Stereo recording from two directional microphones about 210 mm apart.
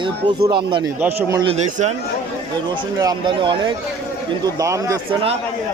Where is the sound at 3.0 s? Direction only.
20° right (ahead or behind).